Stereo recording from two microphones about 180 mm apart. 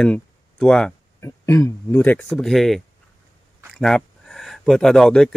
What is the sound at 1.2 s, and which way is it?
Speech, 15° left (ahead or behind).